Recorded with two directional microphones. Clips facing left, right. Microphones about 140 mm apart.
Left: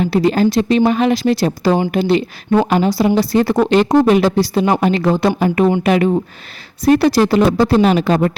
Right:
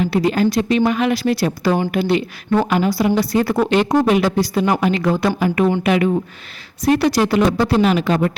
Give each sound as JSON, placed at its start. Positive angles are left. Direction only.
{"t": 0.0, "sound": "a woman's voice", "side_deg": 30}